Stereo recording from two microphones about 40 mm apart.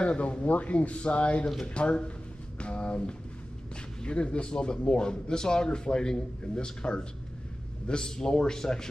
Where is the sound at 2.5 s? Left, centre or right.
Left.